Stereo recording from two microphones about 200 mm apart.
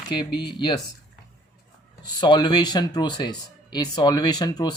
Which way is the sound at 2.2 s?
20° left (ahead or behind).